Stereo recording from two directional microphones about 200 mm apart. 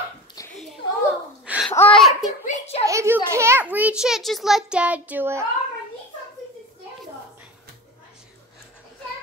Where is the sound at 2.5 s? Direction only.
30° left (ahead or behind).